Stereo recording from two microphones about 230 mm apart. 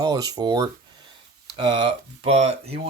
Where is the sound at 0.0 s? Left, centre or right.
Centre.